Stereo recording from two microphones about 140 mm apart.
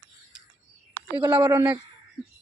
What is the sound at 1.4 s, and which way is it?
Speech, 25° right (ahead or behind).